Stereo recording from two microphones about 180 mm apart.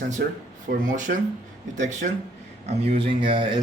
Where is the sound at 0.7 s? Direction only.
50° right (ahead or behind).